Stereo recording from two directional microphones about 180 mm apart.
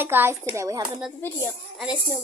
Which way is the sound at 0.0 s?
10° right (ahead or behind).